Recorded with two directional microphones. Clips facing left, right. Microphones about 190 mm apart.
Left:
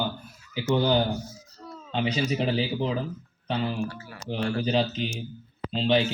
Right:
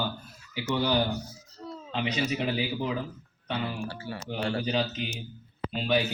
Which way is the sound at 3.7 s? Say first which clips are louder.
Left 3 dB; 30° right (ahead or behind).